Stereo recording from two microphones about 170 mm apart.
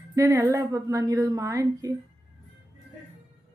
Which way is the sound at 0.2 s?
15° right (ahead or behind).